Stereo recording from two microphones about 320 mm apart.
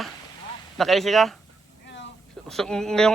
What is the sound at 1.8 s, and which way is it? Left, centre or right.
Vehicle, left.